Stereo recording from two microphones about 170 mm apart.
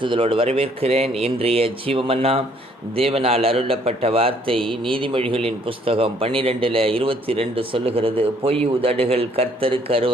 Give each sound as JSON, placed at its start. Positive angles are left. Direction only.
{"t": 0.0, "sound": "a man's voice", "side_deg": -30}